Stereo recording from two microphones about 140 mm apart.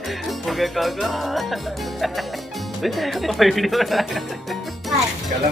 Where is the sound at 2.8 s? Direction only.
Centre (ahead or behind).